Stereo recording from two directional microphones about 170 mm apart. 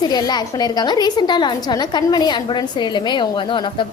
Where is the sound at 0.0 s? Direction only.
25° left (ahead or behind).